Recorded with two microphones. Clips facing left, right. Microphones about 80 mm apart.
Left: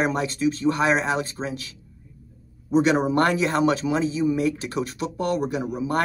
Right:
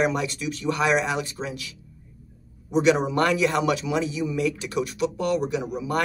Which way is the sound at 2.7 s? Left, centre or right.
Left.